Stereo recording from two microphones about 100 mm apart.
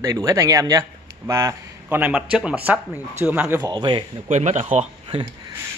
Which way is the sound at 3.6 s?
45° right (ahead or behind).